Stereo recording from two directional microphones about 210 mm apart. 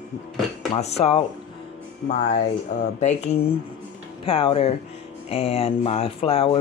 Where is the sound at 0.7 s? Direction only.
30° left (ahead or behind).